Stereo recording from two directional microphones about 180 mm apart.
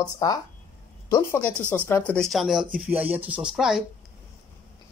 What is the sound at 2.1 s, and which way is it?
Speech, centre (ahead or behind).